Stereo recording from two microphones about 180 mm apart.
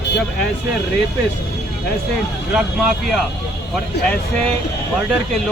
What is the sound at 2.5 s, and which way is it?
Speech, centre (ahead or behind).